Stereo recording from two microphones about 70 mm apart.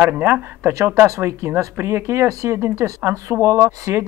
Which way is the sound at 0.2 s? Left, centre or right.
Right.